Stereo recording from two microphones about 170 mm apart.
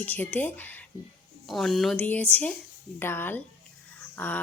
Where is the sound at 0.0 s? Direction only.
10° left (ahead or behind).